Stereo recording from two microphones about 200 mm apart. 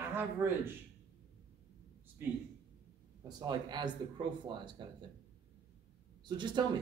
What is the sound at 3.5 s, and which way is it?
Speech, 20° right (ahead or behind).